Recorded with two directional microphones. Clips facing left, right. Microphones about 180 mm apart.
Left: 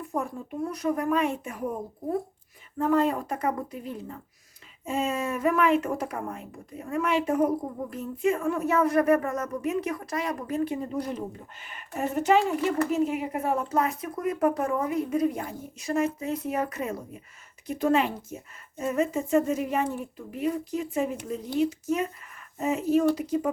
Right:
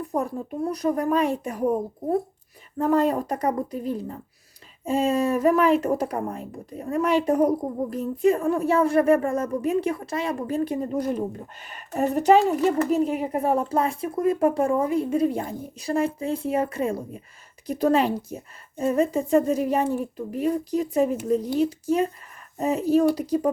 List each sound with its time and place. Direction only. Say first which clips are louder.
0.0 s speech: right 4 dB; 35° right (ahead or behind)